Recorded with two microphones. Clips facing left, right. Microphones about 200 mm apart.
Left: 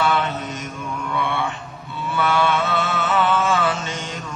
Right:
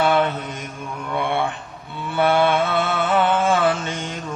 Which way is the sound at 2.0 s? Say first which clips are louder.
Right 3 dB; 55° right (ahead or behind).